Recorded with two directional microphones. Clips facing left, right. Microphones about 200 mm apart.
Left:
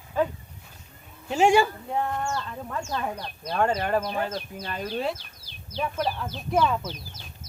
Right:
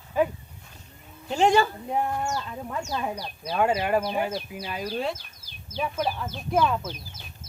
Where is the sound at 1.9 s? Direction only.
10° right (ahead or behind).